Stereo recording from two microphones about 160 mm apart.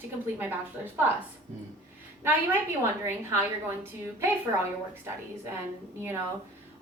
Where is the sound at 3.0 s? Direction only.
15° right (ahead or behind).